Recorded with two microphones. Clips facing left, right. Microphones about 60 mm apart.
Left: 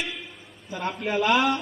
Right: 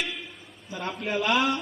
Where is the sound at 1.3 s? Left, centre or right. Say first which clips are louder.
Left 3 dB; centre.